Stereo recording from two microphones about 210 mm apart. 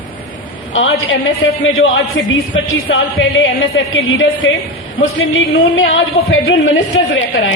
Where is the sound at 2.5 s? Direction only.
65° left (ahead or behind).